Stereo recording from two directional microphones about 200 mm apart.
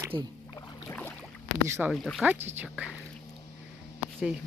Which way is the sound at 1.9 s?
Centre (ahead or behind).